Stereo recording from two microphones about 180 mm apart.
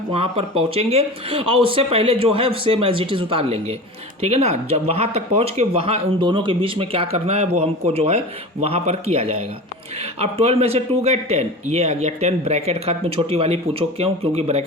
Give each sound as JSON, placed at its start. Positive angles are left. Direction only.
{"t": 0.1, "sound": "speech", "side_deg": -30}